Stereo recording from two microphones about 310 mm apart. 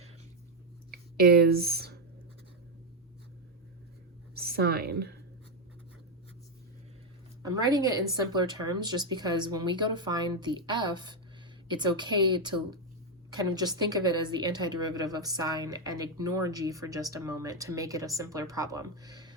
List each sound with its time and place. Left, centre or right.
1.2 s speech: right
4.4 s a woman's voice: right
7.4 s a woman's voice: centre